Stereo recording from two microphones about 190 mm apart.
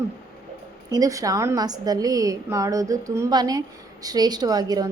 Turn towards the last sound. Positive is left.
turn(degrees=-20)  # may be behind; listen again after turning